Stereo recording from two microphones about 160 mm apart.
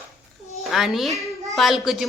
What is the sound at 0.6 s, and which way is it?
A woman's voice, centre (ahead or behind).